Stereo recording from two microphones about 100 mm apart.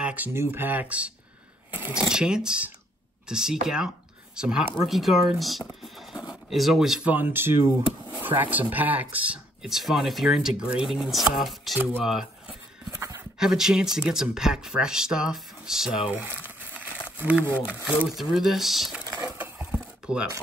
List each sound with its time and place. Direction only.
0.0 s speech: 15° right (ahead or behind)
2.0 s speech: 5° right (ahead or behind)
7.1 s speech: 20° right (ahead or behind); by 11.8 s centre (ahead or behind)
12.0 s a sound: 5° right (ahead or behind)
13.4 s speech: 5° right (ahead or behind)
17.8 s speech: 5° right (ahead or behind)
19.2 s a sound: 15° right (ahead or behind)
20.1 s speech: 10° right (ahead or behind)